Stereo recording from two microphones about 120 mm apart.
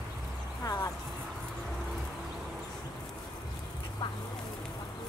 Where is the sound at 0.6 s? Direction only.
30° left (ahead or behind).